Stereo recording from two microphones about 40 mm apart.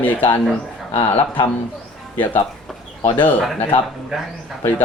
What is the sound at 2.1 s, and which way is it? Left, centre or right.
Speech, left.